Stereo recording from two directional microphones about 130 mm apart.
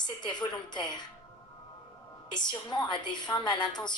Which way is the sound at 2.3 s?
35° left (ahead or behind).